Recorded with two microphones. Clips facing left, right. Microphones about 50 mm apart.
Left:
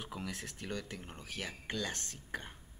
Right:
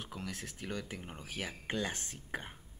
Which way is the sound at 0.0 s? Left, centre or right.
Centre.